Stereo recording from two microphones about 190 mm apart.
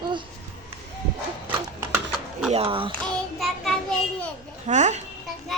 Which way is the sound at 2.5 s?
30° right (ahead or behind).